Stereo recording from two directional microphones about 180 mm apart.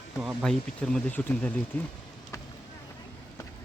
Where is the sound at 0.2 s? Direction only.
Centre (ahead or behind).